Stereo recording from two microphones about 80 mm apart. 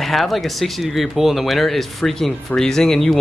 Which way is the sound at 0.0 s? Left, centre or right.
Centre.